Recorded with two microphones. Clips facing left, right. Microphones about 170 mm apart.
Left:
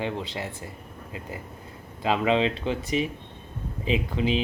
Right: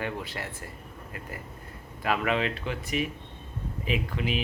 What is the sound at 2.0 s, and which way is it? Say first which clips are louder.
Speech: left 4 dB; 25° left (ahead or behind).